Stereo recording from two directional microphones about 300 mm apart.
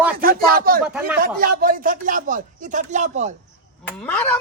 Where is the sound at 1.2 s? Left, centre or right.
Right.